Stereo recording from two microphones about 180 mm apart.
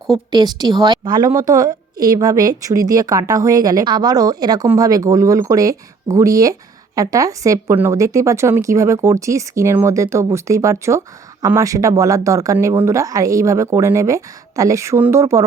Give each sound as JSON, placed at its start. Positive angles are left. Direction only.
{"t": 0.3, "sound": "a woman's voice", "side_deg": -20}